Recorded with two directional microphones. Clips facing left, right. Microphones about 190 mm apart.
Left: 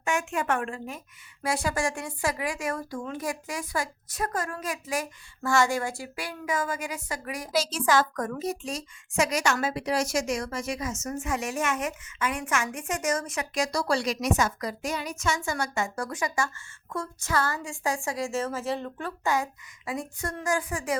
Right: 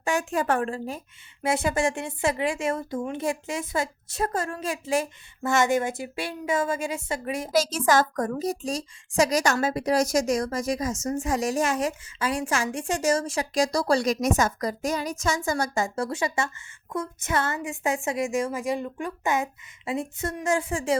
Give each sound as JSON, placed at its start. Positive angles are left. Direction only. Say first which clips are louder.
{"t": 0.0, "sound": "a woman's voice", "louder": "right 3 dB", "side_deg": -35}
{"t": 1.4, "sound": "speech", "louder": "right 4 dB", "side_deg": -20}
{"t": 7.5, "sound": "a woman's voice", "louder": "right 2 dB", "side_deg": -45}